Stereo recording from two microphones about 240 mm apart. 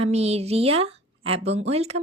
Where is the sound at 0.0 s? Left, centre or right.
Right.